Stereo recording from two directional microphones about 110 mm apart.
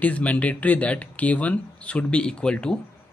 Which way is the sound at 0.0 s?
15° left (ahead or behind).